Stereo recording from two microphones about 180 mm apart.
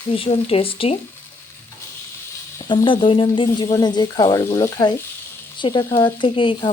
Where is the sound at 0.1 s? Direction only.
35° left (ahead or behind).